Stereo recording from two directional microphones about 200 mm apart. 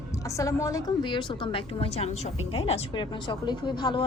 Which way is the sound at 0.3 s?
15° left (ahead or behind).